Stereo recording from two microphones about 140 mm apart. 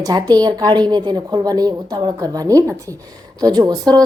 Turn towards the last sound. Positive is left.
turn(degrees=-25)  # may be behind; listen again after turning